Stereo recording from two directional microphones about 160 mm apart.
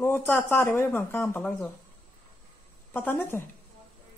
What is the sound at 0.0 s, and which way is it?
A woman's voice, 15° left (ahead or behind).